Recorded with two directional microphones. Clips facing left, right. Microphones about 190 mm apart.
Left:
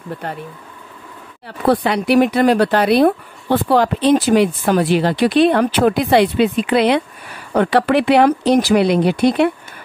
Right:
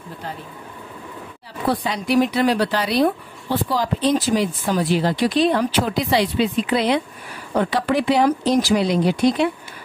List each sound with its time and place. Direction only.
1.7 s a woman's voice: 65° left (ahead or behind)